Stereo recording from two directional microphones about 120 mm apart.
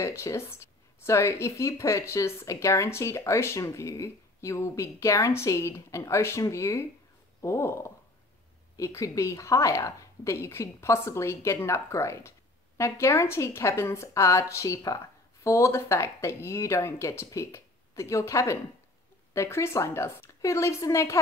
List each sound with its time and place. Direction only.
0.0 s speech: 25° left (ahead or behind)